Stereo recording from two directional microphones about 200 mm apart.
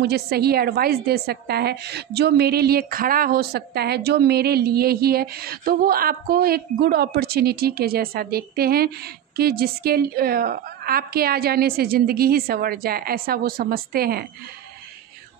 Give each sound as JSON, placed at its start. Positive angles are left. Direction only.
{"t": 0.0, "sound": "a woman's voice", "side_deg": -50}